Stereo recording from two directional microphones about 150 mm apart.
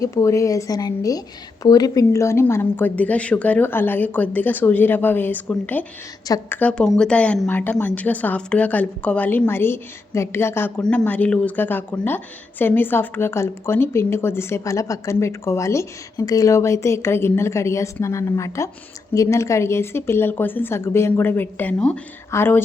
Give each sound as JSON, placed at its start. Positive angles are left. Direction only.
{"t": 0.0, "sound": "a woman's voice", "side_deg": 20}